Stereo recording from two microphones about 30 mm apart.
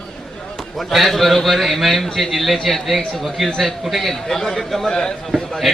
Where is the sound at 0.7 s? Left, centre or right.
Centre.